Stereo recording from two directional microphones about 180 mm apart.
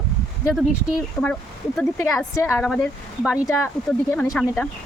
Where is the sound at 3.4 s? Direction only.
15° left (ahead or behind).